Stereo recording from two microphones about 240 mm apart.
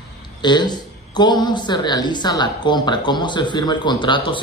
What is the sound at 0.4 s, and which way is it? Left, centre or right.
A woman's voice, centre.